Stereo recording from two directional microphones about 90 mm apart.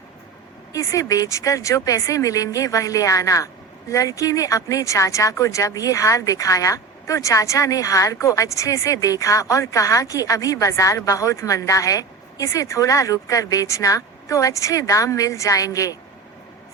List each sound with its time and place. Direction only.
0.7 s speech: 35° left (ahead or behind)